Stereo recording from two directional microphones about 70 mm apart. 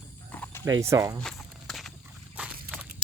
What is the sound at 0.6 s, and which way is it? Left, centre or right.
Speech, right.